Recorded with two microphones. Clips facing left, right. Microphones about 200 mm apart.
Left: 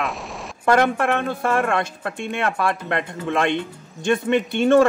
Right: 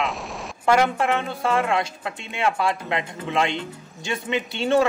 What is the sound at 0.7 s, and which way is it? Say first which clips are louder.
Speech: left 2 dB; 55° left (ahead or behind).